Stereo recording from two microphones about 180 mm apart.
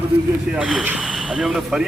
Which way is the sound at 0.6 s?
5° right (ahead or behind).